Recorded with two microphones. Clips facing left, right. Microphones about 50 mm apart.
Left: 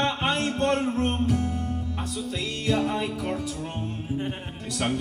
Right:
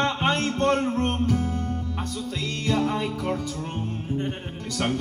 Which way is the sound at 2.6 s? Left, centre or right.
Centre.